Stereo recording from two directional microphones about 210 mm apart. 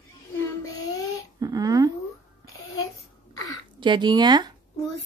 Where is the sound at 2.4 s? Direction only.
80° left.